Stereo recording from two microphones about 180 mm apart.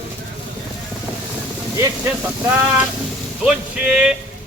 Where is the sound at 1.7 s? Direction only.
15° right (ahead or behind).